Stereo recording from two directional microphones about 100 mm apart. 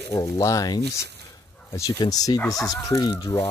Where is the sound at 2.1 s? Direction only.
40° left (ahead or behind).